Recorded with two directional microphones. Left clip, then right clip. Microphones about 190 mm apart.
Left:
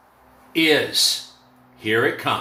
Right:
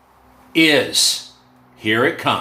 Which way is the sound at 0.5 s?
35° right (ahead or behind).